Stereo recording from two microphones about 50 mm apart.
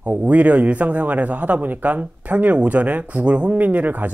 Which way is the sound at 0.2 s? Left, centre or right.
Right.